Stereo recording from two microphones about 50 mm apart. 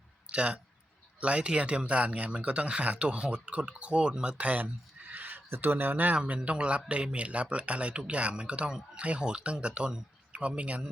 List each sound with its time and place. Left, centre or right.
0.3 s speech: right